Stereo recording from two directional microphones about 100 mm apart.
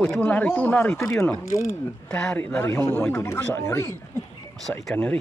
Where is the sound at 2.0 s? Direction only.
10° left (ahead or behind); by 4.0 s 25° left (ahead or behind).